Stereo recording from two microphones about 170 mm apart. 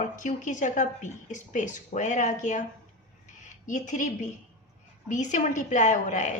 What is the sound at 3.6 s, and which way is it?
Speech, 45° left (ahead or behind).